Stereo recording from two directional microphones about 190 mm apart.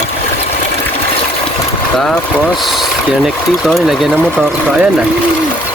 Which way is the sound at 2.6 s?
Centre (ahead or behind).